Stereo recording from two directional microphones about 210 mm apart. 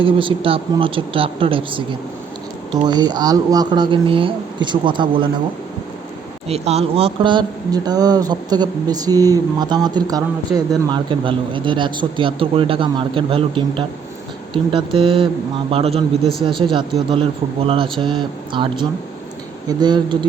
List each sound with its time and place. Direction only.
0.0 s speech: 25° right (ahead or behind)
6.5 s speech: 30° right (ahead or behind)